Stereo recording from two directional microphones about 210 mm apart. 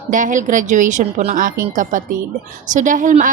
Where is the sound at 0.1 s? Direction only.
40° right (ahead or behind).